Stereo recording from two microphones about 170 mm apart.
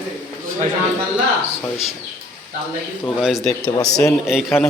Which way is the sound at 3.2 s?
Centre (ahead or behind).